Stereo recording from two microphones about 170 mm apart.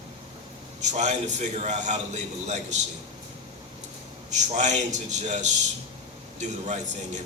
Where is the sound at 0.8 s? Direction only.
45° right (ahead or behind).